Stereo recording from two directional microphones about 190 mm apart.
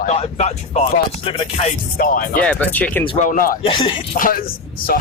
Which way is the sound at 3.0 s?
30° left (ahead or behind).